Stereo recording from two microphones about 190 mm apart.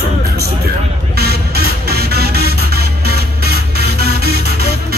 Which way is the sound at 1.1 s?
55° right (ahead or behind).